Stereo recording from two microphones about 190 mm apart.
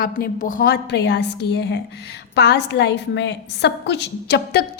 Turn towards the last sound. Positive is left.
turn(degrees=55)  # may be behind; listen again after turning